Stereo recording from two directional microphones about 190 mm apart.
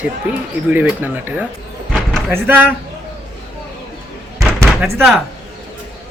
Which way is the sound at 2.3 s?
10° right (ahead or behind).